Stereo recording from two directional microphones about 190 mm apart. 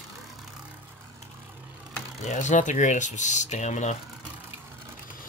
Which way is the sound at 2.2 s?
40° left (ahead or behind).